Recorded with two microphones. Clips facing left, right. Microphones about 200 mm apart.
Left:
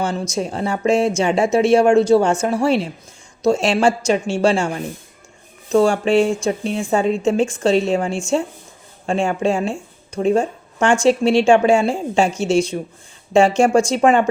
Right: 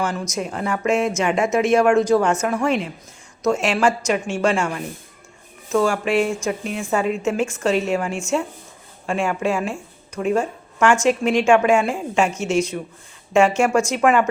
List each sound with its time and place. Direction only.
0.0 s speech: 30° left (ahead or behind)